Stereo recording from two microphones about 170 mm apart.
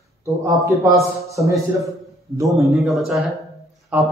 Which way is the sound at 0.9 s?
20° right (ahead or behind).